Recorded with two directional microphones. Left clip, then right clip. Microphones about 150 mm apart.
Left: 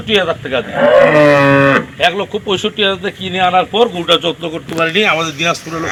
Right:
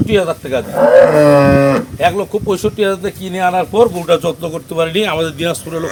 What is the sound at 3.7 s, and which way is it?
Speech, 60° right (ahead or behind).